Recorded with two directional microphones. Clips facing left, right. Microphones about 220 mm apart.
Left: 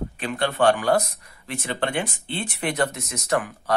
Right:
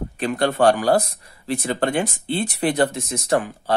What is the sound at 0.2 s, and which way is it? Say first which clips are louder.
Speech: right 4 dB; 40° right (ahead or behind).